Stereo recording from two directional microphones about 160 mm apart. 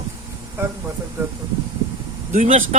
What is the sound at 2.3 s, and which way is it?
Speech, 50° right (ahead or behind).